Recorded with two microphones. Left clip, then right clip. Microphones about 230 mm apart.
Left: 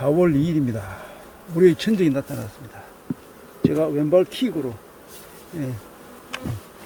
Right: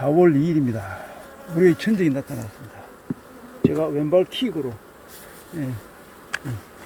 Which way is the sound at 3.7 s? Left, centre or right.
Left.